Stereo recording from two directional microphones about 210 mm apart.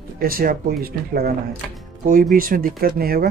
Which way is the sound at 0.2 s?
45° right (ahead or behind).